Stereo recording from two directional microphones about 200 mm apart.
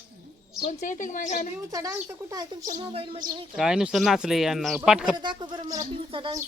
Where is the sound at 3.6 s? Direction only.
5° right (ahead or behind).